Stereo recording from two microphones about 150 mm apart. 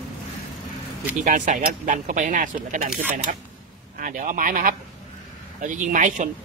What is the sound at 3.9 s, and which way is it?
Speech, 65° right (ahead or behind).